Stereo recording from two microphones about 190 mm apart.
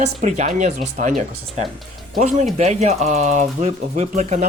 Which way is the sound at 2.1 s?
35° right (ahead or behind).